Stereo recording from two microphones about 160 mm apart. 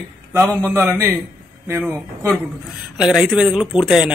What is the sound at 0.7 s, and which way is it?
Speech, 15° right (ahead or behind).